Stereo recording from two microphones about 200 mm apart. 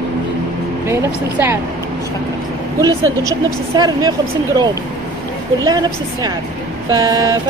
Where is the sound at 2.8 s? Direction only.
15° right (ahead or behind).